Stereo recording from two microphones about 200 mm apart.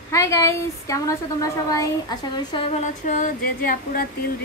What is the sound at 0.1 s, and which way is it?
A woman's voice, 15° left (ahead or behind).